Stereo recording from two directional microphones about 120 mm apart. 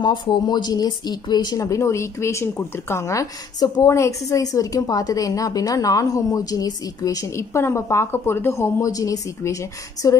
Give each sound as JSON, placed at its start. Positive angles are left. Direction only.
{"t": 0.0, "sound": "speech", "side_deg": 40}